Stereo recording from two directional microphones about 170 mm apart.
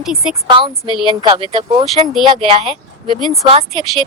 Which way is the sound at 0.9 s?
25° left (ahead or behind).